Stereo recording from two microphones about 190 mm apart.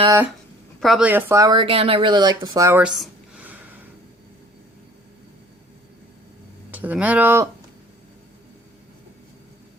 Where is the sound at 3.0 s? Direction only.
10° right (ahead or behind).